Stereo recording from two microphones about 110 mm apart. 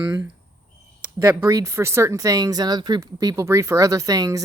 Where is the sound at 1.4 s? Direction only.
25° right (ahead or behind).